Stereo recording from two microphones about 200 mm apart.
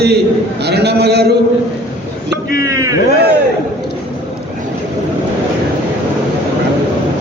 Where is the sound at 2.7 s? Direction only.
15° right (ahead or behind).